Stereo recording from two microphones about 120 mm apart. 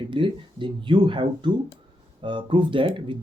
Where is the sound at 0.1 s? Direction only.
45° right (ahead or behind).